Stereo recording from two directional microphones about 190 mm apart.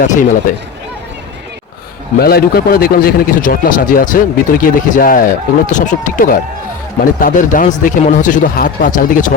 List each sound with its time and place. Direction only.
0.0 s a man's voice: 45° left (ahead or behind)
2.1 s a man's voice: 55° left (ahead or behind)